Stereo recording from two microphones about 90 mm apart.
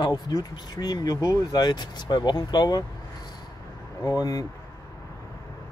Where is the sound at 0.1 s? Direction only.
45° left (ahead or behind).